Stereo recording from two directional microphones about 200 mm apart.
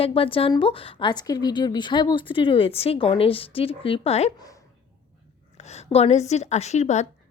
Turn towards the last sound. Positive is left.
turn(degrees=35)  # may be behind; listen again after turning